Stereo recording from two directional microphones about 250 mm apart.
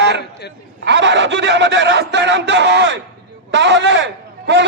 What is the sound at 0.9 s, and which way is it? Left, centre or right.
A man's voice, right.